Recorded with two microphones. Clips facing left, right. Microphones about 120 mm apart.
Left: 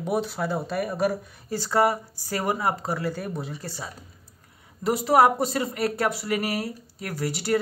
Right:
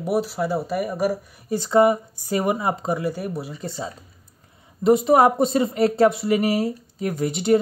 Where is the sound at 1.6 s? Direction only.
20° right (ahead or behind).